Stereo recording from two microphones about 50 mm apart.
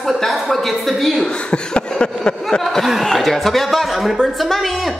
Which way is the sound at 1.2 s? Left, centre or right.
Left.